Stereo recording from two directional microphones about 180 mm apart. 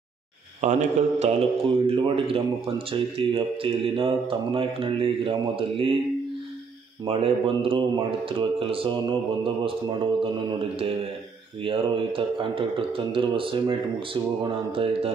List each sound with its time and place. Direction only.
0.6 s a man's voice: 40° right (ahead or behind)
7.1 s a man's voice: 30° right (ahead or behind)
11.6 s a man's voice: 30° right (ahead or behind)